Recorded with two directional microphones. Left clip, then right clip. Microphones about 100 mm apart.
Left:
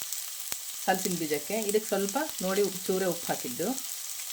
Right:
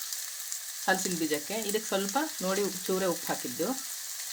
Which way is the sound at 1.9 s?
90° left.